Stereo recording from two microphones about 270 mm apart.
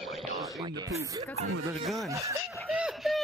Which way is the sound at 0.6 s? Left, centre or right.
Centre.